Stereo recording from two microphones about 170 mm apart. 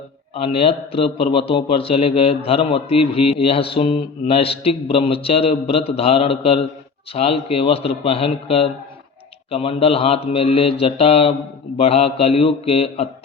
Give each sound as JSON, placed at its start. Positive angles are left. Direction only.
{"t": 0.3, "sound": "speech", "side_deg": 35}